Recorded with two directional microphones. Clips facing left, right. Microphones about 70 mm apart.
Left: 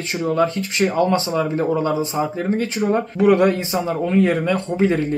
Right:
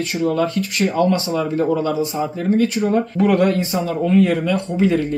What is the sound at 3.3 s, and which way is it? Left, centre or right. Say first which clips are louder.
Speech: even; left.